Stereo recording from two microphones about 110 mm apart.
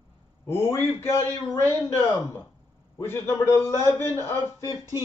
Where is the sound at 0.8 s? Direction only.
25° left (ahead or behind).